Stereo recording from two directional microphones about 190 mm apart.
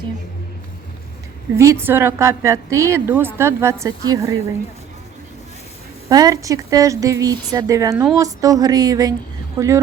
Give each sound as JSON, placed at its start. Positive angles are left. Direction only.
{"t": 1.5, "sound": "a woman's voice", "side_deg": -15}
{"t": 6.1, "sound": "a woman's voice", "side_deg": -20}